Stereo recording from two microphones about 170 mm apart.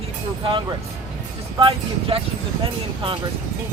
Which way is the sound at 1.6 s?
35° right (ahead or behind).